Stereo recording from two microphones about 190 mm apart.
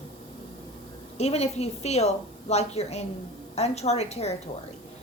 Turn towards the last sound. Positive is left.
turn(degrees=35)  # may be behind; listen again after turning